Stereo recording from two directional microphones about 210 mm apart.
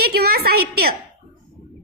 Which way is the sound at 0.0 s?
45° right (ahead or behind).